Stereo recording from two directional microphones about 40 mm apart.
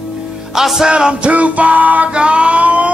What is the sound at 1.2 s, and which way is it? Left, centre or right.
Music, right.